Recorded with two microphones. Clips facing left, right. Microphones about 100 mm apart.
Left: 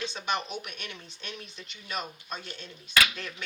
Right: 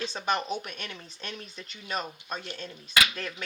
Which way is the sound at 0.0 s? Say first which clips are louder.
Right 2 dB; 40° right (ahead or behind).